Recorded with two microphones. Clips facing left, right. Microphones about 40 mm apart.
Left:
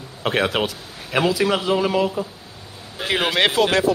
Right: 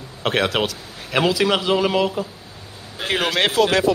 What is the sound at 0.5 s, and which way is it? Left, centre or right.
Speech, centre.